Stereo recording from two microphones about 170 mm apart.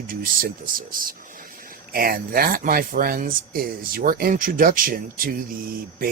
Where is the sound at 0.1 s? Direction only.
55° right (ahead or behind).